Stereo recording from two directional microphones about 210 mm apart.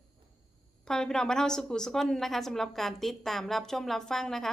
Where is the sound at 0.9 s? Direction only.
5° left (ahead or behind).